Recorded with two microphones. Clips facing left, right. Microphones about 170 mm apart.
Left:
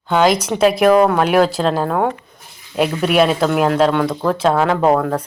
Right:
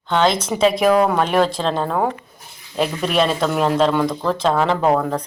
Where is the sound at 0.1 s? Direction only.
10° left (ahead or behind).